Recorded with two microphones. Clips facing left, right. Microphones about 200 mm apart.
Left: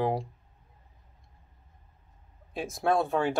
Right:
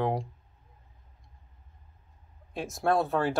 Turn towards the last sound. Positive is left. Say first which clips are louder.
# even
turn(degrees=0)  # may be behind; listen again after turning